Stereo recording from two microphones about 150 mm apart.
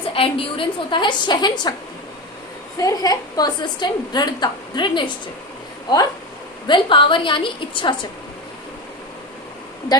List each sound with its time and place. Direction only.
0.0 s a woman's voice: 35° left (ahead or behind)
2.7 s a woman's voice: 25° left (ahead or behind)
6.7 s a woman's voice: 35° left (ahead or behind)